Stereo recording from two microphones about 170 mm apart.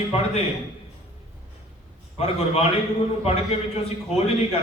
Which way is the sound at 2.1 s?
40° left (ahead or behind).